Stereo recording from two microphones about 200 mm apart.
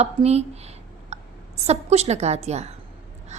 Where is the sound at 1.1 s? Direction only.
35° right (ahead or behind).